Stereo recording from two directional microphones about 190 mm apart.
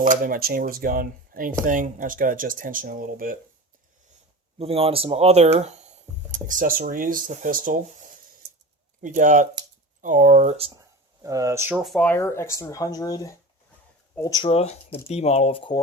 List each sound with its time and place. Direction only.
0.0 s speech: 45° right (ahead or behind)
4.5 s speech: 30° right (ahead or behind)
10.8 s a sound: 15° right (ahead or behind)
11.8 s speech: 5° left (ahead or behind); by 15.8 s 25° left (ahead or behind)